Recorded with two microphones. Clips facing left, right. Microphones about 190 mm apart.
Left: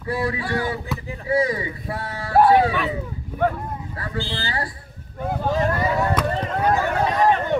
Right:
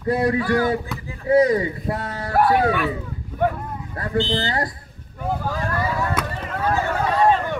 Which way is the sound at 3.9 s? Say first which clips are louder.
Right 6 dB; 45° right (ahead or behind).